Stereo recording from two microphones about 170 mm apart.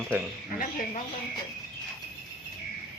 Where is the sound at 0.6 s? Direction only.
50° left (ahead or behind).